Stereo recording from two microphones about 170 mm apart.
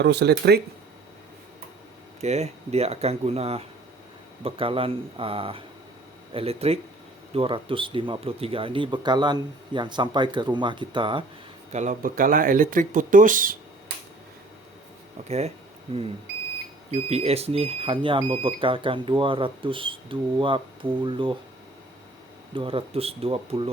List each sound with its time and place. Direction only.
0.0 s speech: 80° right
2.2 s speech: 40° right (ahead or behind)
11.7 s speech: 45° right (ahead or behind)
15.3 s speech: 40° right (ahead or behind)
22.5 s speech: 35° right (ahead or behind)